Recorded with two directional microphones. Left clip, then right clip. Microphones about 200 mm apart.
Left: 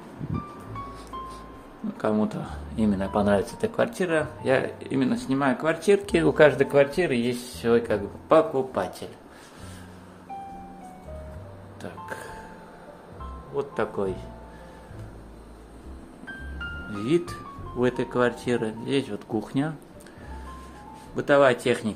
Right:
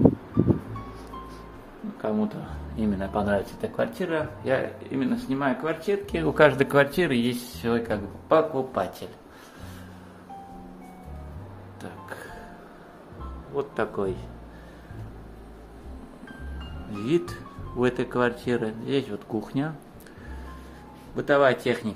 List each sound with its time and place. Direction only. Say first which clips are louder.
2.0 s a man's voice: left 3 dB; 25° left (ahead or behind)
2.7 s speech: left 2 dB; 15° left (ahead or behind)
6.2 s speech: even; centre (ahead or behind)
8.7 s speech: even; centre (ahead or behind)
11.8 s music: left 3 dB; 10° left (ahead or behind)
13.6 s speech: even; centre (ahead or behind)
16.9 s speech: even; 5° left (ahead or behind)
21.2 s speech: left 1 dB; 10° left (ahead or behind)